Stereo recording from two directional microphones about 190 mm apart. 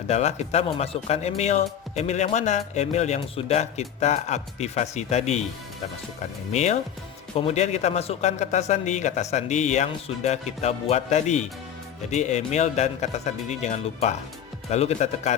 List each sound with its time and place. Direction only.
0.1 s speech: 35° left (ahead or behind)
6.5 s speech: 35° left (ahead or behind)